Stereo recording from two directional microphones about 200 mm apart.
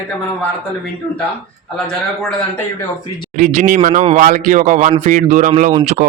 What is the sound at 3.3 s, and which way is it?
Speech, 35° right (ahead or behind).